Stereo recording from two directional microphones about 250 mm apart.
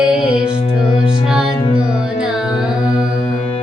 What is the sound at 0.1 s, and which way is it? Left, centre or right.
Music, centre.